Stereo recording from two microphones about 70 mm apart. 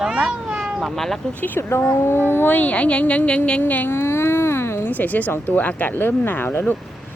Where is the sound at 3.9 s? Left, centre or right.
Left.